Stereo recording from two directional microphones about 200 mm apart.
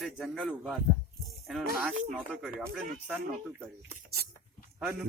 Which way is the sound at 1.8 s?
Centre (ahead or behind).